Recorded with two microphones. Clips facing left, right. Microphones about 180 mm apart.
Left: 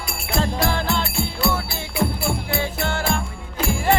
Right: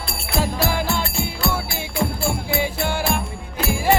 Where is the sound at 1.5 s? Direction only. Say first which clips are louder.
Even; 20° right (ahead or behind).